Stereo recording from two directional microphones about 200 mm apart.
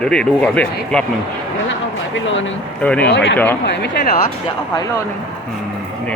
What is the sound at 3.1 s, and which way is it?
Speech, 55° left (ahead or behind).